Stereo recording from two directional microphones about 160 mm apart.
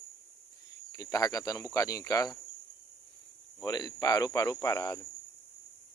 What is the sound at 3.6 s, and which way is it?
Speech, 25° left (ahead or behind).